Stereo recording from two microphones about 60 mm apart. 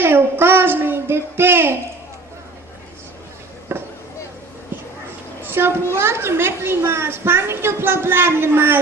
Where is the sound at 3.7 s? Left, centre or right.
Right.